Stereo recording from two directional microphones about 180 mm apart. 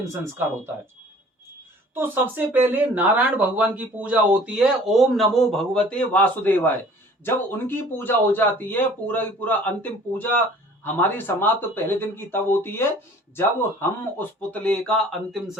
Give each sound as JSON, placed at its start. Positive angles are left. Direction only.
{"t": 0.0, "sound": "speech", "side_deg": -15}
{"t": 2.0, "sound": "speech", "side_deg": -10}